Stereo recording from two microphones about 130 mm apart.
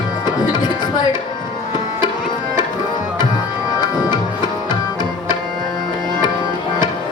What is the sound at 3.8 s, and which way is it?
Music, 30° left (ahead or behind).